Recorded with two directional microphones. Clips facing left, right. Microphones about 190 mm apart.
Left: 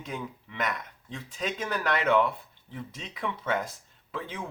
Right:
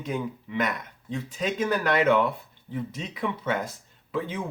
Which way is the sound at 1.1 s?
5° right (ahead or behind).